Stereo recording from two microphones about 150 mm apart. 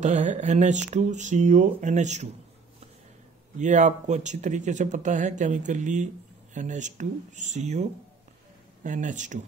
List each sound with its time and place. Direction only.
0.0 s speech: 50° right (ahead or behind)
3.5 s speech: 55° right (ahead or behind)